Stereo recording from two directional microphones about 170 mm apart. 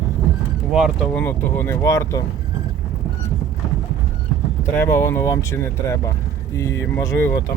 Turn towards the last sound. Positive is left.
turn(degrees=15)  # may be behind; listen again after turning